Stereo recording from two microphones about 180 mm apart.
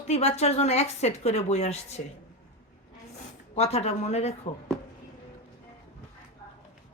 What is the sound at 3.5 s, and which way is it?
Speech, 35° left (ahead or behind).